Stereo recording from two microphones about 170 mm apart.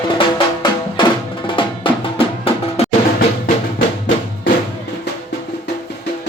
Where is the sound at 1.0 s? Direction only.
25° left (ahead or behind).